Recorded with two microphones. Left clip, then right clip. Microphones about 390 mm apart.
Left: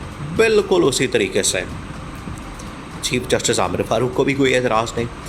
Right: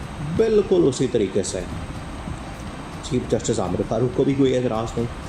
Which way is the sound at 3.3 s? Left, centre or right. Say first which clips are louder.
Left 5 dB; left.